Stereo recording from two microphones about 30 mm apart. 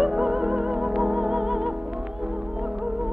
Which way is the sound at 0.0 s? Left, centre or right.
Centre.